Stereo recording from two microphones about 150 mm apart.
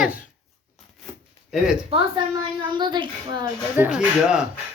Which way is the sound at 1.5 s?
5° right (ahead or behind).